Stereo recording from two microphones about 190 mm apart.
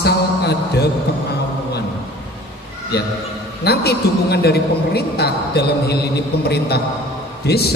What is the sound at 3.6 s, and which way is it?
A man's voice, 55° left (ahead or behind).